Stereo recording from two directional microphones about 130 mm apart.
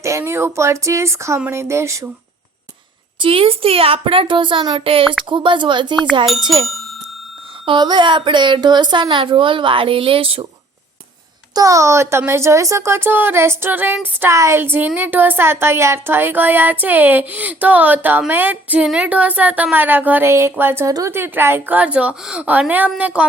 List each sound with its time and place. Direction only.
0.0 s speech: 20° right (ahead or behind)
3.2 s a woman's voice: 45° right (ahead or behind)
7.6 s a woman's voice: 35° right (ahead or behind)
11.5 s speech: 25° right (ahead or behind)